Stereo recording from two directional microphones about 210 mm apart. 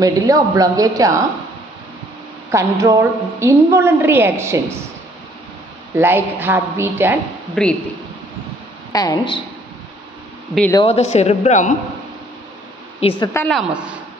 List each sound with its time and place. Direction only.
0.0 s a woman's voice: 15° right (ahead or behind)
2.5 s a woman's voice: 15° right (ahead or behind)
5.9 s a woman's voice: 10° right (ahead or behind)
7.6 s speech: 5° left (ahead or behind)
8.9 s speech: 15° left (ahead or behind)
10.7 s speech: 25° left (ahead or behind)
13.2 s speech: 15° left (ahead or behind)
13.5 s speech: 5° right (ahead or behind)